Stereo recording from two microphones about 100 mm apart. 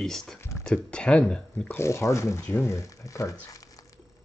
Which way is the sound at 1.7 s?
30° left (ahead or behind).